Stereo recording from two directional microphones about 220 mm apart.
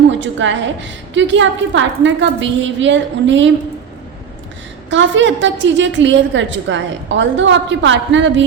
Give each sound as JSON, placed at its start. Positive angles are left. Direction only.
{"t": 0.1, "sound": "a woman's voice", "side_deg": -55}
{"t": 4.9, "sound": "a woman's voice", "side_deg": -55}